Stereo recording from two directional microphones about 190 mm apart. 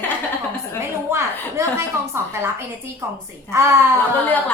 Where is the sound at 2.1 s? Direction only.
15° right (ahead or behind).